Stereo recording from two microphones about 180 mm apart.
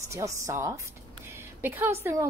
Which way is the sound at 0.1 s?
15° right (ahead or behind).